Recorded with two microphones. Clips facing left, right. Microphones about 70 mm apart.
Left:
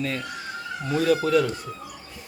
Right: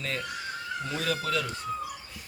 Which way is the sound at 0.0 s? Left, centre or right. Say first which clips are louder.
Left 4 dB; centre.